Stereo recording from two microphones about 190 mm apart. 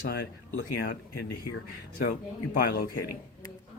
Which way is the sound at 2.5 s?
50° left (ahead or behind).